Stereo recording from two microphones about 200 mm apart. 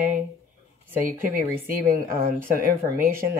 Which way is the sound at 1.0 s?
45° right (ahead or behind).